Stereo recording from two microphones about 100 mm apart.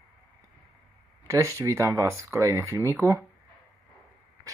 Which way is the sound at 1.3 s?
30° right (ahead or behind).